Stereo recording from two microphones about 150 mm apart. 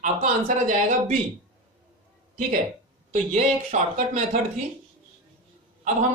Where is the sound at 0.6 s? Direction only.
55° right (ahead or behind).